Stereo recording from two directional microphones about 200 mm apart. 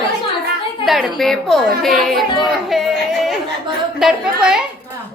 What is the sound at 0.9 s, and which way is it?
A woman's voice, centre (ahead or behind).